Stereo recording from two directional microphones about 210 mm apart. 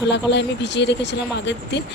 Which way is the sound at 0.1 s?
55° left (ahead or behind).